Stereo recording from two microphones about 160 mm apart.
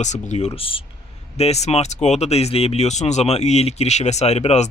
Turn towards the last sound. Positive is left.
turn(degrees=45)  # may be behind; listen again after turning